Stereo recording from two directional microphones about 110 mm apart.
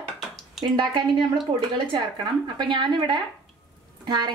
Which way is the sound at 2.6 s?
45° right (ahead or behind).